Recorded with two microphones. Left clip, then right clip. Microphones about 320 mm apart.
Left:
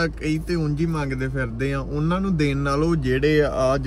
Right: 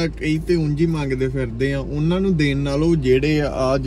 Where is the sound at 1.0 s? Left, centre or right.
Left.